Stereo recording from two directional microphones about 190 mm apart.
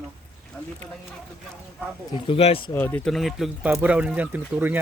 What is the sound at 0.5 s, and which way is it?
Speech, 5° left (ahead or behind).